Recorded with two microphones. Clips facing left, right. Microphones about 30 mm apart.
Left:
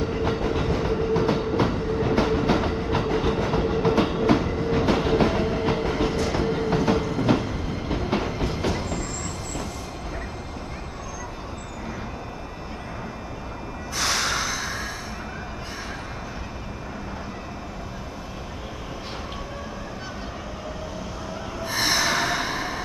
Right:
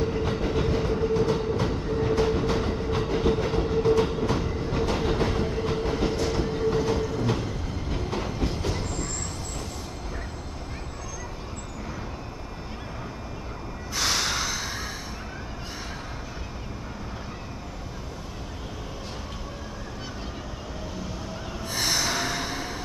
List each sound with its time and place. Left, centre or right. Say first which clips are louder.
0.0 s train: left 2 dB; centre
6.0 s train: left 2 dB; centre
6.3 s train: left 2 dB; centre
13.9 s snort: left 2 dB; centre
21.6 s snort: left 4 dB; left